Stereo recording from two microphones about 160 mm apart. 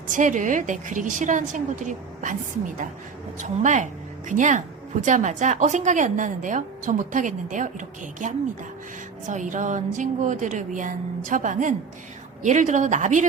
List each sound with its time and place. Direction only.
0.1 s a woman's voice: 50° right (ahead or behind)